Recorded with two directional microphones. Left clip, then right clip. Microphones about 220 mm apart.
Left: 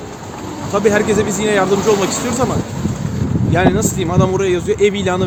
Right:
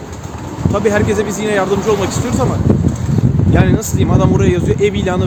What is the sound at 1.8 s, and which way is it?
Speech, 40° left (ahead or behind).